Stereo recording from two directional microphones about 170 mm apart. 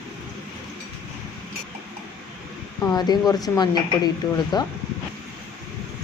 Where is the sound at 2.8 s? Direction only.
25° left (ahead or behind).